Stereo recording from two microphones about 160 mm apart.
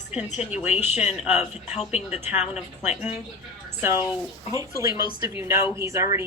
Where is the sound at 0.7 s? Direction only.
40° left (ahead or behind).